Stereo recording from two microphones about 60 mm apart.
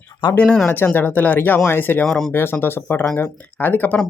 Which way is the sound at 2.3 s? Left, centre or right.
Left.